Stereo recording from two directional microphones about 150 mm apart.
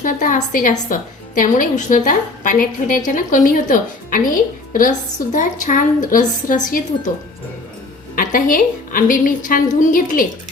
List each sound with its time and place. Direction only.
0.0 s a woman's voice: 60° left (ahead or behind)
8.1 s a woman's voice: 65° left (ahead or behind)